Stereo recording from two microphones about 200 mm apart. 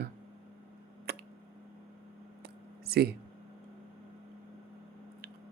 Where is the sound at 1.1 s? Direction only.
55° right (ahead or behind).